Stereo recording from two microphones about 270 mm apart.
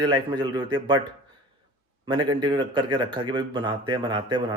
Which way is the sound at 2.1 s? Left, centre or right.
Centre.